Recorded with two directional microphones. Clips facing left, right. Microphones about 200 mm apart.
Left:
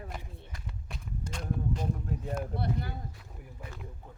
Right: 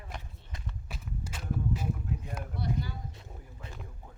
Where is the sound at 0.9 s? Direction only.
5° right (ahead or behind).